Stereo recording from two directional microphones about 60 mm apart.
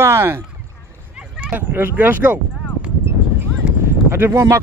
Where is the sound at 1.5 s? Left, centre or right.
Right.